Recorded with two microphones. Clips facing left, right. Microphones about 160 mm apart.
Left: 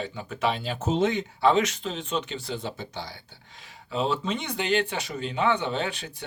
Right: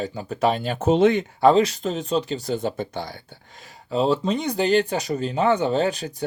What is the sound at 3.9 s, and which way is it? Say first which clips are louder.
Speech: right 6 dB; 40° right (ahead or behind).